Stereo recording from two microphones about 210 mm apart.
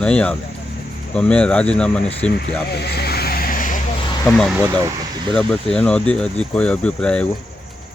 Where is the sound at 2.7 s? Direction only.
50° left (ahead or behind).